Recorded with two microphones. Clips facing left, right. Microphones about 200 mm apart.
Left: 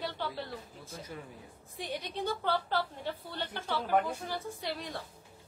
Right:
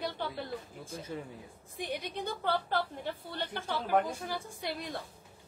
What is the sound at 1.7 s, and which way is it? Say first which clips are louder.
Speech: right 1 dB; 15° right (ahead or behind).